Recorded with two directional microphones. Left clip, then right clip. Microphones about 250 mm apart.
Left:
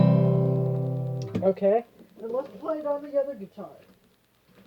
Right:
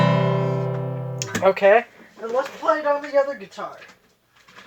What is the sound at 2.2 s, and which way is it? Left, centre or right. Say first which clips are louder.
Speech: right 7 dB; right.